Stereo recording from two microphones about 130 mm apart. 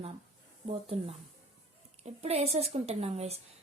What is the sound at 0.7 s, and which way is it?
A woman's voice, 50° right (ahead or behind).